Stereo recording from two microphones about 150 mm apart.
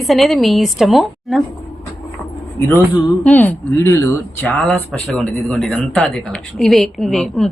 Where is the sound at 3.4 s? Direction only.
15° left (ahead or behind).